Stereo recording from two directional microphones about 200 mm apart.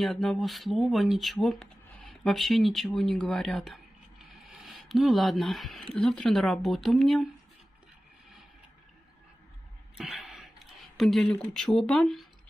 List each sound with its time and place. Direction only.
0.0 s speech: centre (ahead or behind)
9.9 s a sound: centre (ahead or behind)
11.0 s speech: centre (ahead or behind)